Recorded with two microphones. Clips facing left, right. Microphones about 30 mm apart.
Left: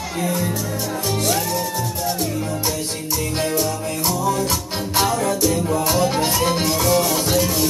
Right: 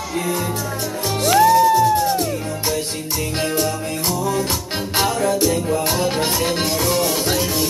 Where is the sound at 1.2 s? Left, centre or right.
Centre.